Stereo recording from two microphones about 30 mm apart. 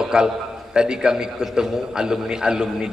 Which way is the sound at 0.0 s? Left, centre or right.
Right.